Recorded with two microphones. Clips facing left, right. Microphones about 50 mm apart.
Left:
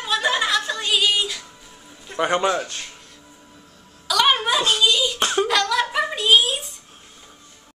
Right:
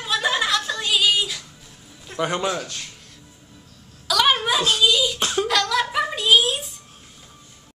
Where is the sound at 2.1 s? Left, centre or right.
Centre.